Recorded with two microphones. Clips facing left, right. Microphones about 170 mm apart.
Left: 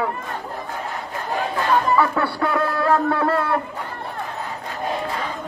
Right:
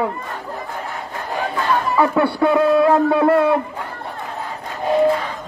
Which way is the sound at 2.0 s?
20° right (ahead or behind).